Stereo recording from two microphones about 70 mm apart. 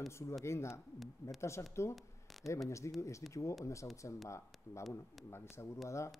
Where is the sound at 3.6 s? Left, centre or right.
Left.